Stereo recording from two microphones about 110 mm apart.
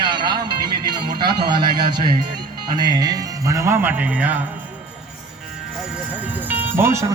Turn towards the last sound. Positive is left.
turn(degrees=-25)  # may be behind; listen again after turning